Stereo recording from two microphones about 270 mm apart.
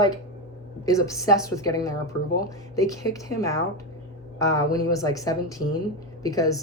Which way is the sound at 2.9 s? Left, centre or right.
Centre.